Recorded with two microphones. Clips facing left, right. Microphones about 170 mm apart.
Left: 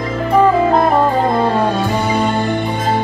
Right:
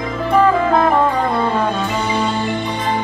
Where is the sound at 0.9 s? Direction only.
40° left (ahead or behind).